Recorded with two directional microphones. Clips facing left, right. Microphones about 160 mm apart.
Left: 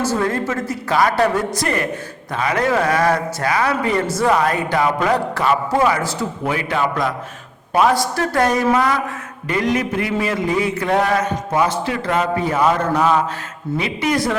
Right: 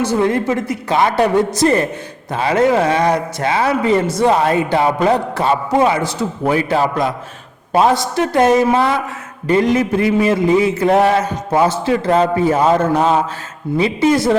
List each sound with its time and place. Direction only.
0.2 s a man's voice: 20° right (ahead or behind)
6.4 s a man's voice: 35° right (ahead or behind)